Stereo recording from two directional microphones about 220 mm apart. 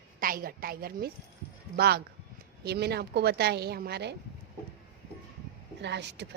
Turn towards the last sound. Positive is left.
turn(degrees=-50)  # may be behind; listen again after turning